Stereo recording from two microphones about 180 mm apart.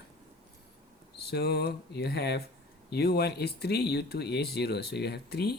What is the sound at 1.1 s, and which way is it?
Speech, 65° left (ahead or behind).